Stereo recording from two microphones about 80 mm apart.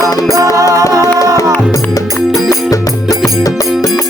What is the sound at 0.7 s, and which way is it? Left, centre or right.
Music, right.